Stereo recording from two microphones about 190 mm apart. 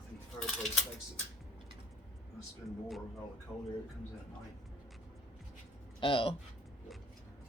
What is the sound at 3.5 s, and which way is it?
Speech, 5° left (ahead or behind).